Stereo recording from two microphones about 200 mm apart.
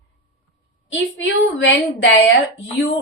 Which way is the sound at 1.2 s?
70° left (ahead or behind).